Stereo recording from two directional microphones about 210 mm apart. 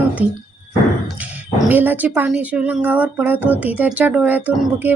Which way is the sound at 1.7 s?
10° right (ahead or behind).